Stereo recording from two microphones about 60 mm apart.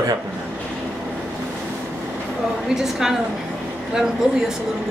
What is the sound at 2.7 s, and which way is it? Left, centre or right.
Speech, centre.